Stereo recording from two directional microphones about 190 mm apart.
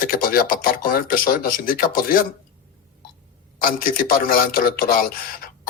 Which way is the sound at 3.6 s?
50° left (ahead or behind).